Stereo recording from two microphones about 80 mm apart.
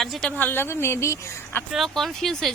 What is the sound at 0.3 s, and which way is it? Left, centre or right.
Speech, left.